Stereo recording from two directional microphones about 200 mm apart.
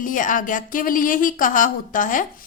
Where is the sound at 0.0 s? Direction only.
40° left (ahead or behind).